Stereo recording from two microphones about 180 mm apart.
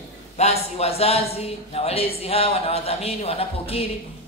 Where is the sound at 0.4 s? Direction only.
35° left (ahead or behind).